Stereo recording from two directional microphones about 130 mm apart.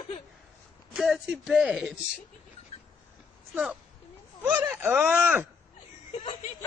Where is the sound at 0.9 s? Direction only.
5° right (ahead or behind).